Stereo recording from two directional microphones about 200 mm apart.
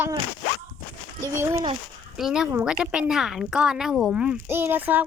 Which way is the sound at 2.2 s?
Centre (ahead or behind).